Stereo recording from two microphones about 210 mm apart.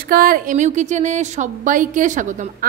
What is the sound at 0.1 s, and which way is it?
A woman's voice, 45° right (ahead or behind).